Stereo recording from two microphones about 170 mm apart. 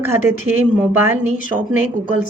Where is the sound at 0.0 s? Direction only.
15° right (ahead or behind).